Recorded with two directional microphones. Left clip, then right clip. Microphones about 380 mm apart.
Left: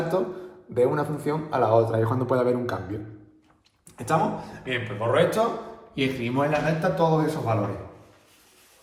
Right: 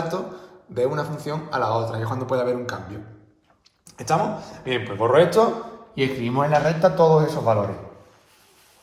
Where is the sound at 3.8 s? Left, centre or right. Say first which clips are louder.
Right 2 dB; centre.